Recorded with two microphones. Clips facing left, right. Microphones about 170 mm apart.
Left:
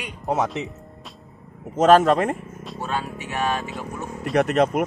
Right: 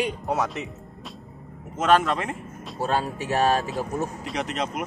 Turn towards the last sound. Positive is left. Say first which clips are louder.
# left 10 dB
turn(degrees=55)  # may be behind; listen again after turning